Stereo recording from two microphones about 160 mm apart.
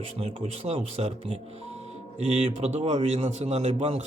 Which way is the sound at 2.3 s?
40° right (ahead or behind).